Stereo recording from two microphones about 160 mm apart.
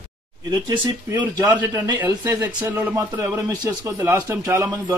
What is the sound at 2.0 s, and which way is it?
Speech, 10° right (ahead or behind).